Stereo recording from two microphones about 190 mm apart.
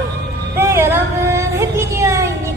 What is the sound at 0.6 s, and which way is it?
Child singing, 15° right (ahead or behind).